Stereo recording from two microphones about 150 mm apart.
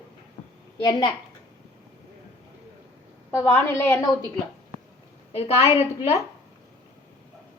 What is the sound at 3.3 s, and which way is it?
Speech, 15° left (ahead or behind).